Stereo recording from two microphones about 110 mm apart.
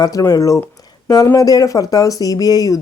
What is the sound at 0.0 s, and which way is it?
A woman's voice, 35° left (ahead or behind).